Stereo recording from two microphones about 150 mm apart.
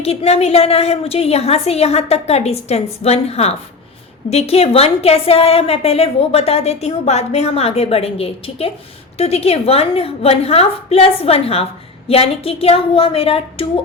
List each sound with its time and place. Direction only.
0.0 s a woman's voice: 45° left (ahead or behind)